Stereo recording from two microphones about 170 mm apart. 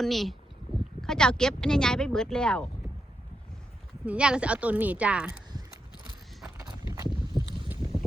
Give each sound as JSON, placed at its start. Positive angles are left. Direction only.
{"t": 0.0, "sound": "speech", "side_deg": 0}
{"t": 4.0, "sound": "a woman's voice", "side_deg": -5}
{"t": 6.6, "sound": "a sound", "side_deg": -20}
{"t": 7.1, "sound": "boat", "side_deg": 30}